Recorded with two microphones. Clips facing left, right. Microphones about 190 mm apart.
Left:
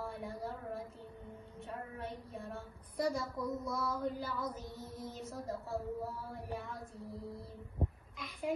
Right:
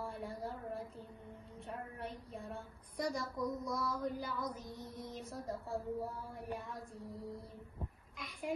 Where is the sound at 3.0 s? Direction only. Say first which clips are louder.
Left 2 dB; centre (ahead or behind).